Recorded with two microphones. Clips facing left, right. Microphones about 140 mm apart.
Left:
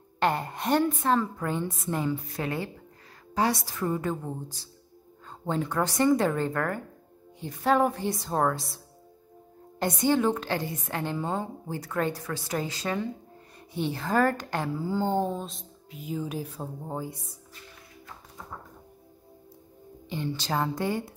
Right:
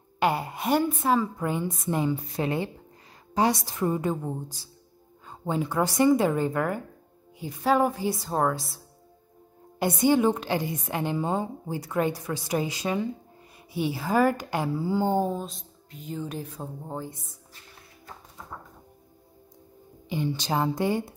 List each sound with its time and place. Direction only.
0.2 s a woman's voice: 5° right (ahead or behind); by 17.2 s 10° left (ahead or behind)
20.1 s a woman's voice: 15° right (ahead or behind)